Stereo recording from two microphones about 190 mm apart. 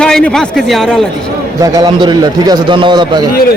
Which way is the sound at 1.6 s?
20° right (ahead or behind).